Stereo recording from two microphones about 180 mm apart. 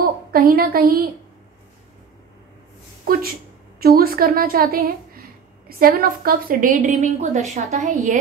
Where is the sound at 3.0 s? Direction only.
55° right (ahead or behind).